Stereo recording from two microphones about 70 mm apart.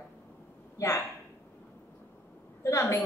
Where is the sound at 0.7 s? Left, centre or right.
Left.